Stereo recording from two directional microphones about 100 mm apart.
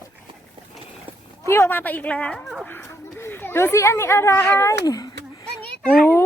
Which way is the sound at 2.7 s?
25° left (ahead or behind).